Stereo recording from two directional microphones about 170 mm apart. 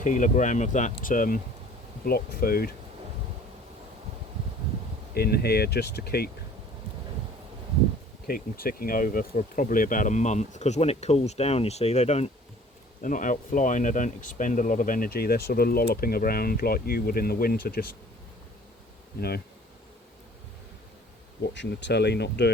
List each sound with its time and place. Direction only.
0.0 s speech: 45° left (ahead or behind)
2.0 s speech: 60° left (ahead or behind)
5.1 s speech: 70° left (ahead or behind)
8.3 s speech: 60° left (ahead or behind); by 12.3 s 40° left (ahead or behind)
13.0 s speech: 50° left (ahead or behind)
21.5 s speech: 90° left